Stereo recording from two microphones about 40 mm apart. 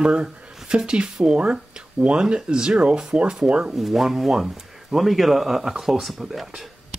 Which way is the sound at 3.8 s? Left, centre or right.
Centre.